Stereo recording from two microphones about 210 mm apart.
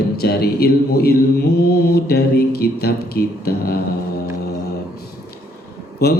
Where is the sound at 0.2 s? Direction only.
50° left (ahead or behind).